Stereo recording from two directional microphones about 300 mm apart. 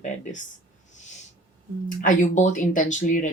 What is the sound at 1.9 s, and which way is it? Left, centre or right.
Speech, left.